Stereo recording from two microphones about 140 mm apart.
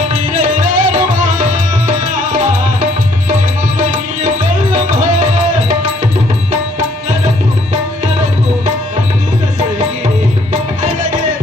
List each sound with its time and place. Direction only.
0.1 s music: 65° right (ahead or behind)
4.7 s music: 60° right (ahead or behind)
10.8 s music: 60° right (ahead or behind)